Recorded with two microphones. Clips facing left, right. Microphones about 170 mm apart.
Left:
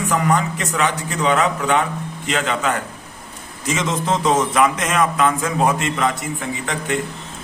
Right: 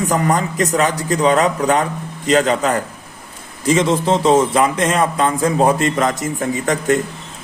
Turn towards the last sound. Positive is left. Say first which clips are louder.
# right 7 dB
turn(degrees=-45)  # may be behind; listen again after turning